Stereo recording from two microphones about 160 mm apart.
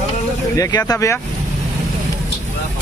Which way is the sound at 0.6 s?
25° left (ahead or behind).